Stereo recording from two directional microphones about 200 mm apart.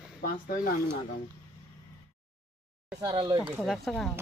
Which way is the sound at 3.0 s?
20° right (ahead or behind).